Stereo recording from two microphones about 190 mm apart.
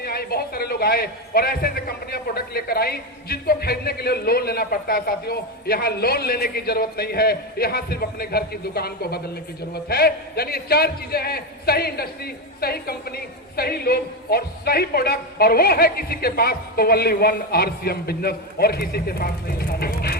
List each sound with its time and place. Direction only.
0.0 s a man's voice: 55° left (ahead or behind)